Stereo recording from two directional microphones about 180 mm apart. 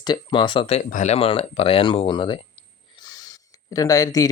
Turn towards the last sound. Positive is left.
turn(degrees=20)  # may be behind; listen again after turning